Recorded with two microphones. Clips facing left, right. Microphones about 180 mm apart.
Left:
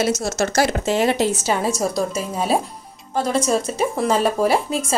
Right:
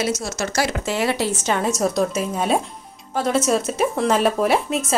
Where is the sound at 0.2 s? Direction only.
45° left (ahead or behind).